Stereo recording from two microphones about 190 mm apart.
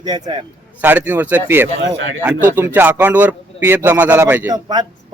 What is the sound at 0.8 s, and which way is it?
Speech, 10° right (ahead or behind).